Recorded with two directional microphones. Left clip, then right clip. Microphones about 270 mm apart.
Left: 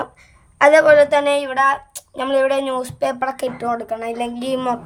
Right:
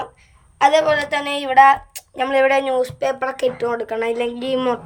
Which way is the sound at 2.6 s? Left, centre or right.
Centre.